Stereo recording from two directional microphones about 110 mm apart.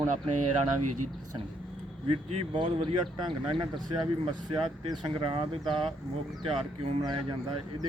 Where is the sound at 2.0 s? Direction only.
65° right (ahead or behind).